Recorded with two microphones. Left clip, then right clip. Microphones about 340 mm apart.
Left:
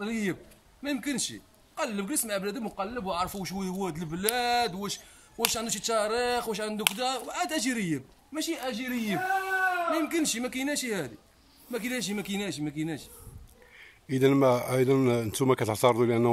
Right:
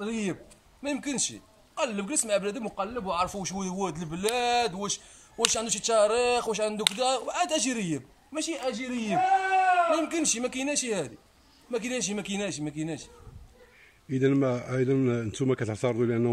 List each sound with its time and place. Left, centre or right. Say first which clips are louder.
0.0 s a man's voice: even; centre
14.1 s speech: left 3 dB; centre